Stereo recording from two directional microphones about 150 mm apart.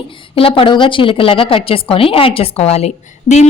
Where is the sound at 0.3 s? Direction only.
35° left (ahead or behind).